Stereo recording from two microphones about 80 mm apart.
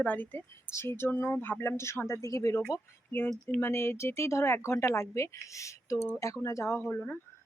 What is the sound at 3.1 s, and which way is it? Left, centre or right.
Speech, left.